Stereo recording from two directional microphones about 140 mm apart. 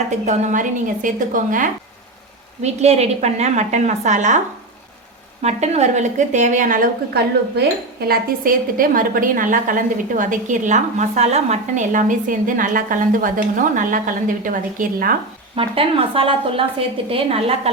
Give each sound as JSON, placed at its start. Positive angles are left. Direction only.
{"t": 0.3, "sound": "a woman's voice", "side_deg": -60}
{"t": 2.6, "sound": "a woman's voice", "side_deg": -50}
{"t": 5.4, "sound": "a woman's voice", "side_deg": -50}
{"t": 8.0, "sound": "a woman's voice", "side_deg": -90}
{"t": 15.5, "sound": "a woman's voice", "side_deg": -40}